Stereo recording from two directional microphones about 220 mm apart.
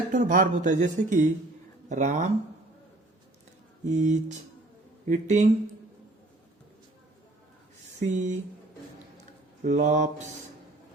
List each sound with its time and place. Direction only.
0.1 s speech: 35° right (ahead or behind)
3.8 s speech: 35° right (ahead or behind)
8.0 s speech: 35° right (ahead or behind)
9.6 s speech: 35° right (ahead or behind)